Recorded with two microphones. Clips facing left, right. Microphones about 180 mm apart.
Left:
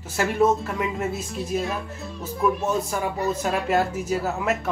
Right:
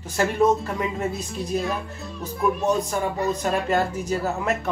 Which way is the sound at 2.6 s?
5° left (ahead or behind).